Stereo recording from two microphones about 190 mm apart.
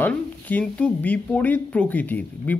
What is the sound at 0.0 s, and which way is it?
Speech, 10° left (ahead or behind).